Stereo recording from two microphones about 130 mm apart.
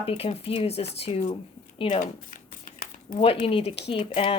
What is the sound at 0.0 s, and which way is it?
Speech, 50° left (ahead or behind).